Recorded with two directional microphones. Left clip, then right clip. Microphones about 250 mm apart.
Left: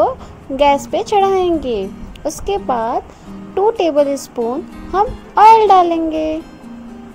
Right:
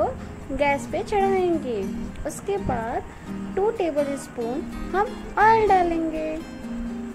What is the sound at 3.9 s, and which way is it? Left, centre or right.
Speech, centre.